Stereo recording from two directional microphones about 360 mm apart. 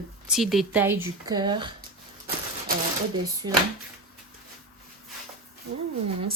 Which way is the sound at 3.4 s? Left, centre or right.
Centre.